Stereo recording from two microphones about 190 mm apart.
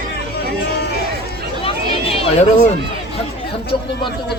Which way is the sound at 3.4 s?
55° left (ahead or behind).